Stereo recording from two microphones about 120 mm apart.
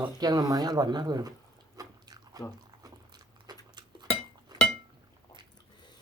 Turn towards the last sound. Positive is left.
turn(degrees=-35)  # may be behind; listen again after turning